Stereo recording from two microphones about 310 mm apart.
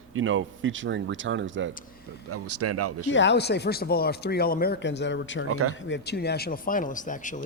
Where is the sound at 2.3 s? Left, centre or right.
Right.